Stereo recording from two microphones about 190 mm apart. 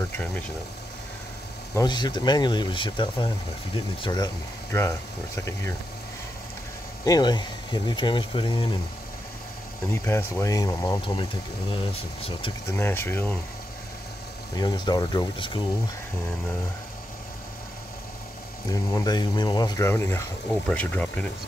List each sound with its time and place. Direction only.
1.8 s speech: 20° left (ahead or behind)
7.1 s speech: 20° left (ahead or behind)
10.0 s speech: 15° left (ahead or behind); by 12.5 s 30° left (ahead or behind)
12.7 s speech: 10° left (ahead or behind)
14.6 s speech: 20° left (ahead or behind)
18.7 s speech: 20° left (ahead or behind)